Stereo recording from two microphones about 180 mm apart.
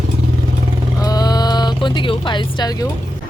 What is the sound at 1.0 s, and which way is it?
Music, 20° left (ahead or behind).